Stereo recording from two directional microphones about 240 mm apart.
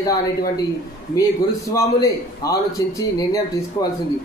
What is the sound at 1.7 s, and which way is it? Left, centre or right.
A man's voice, centre.